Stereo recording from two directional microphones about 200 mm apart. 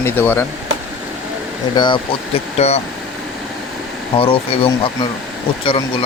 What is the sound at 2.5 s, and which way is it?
Speech, 30° left (ahead or behind).